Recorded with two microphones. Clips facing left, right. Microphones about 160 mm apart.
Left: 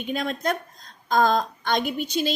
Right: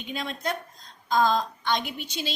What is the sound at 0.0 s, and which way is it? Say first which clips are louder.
A woman's voice: left 5 dB; 50° left (ahead or behind).